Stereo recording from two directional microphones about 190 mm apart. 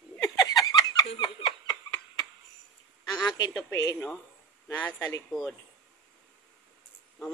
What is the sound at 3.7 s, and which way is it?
Speech, 15° left (ahead or behind).